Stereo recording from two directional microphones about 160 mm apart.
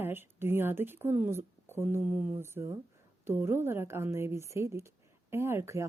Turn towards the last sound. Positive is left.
turn(degrees=-15)  # may be behind; listen again after turning